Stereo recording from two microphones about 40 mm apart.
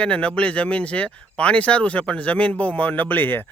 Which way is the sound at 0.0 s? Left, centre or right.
Left.